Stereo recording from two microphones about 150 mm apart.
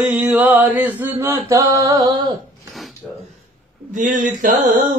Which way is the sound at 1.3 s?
25° right (ahead or behind).